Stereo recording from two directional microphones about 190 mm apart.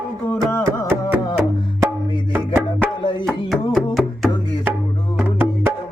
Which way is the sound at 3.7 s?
Centre (ahead or behind).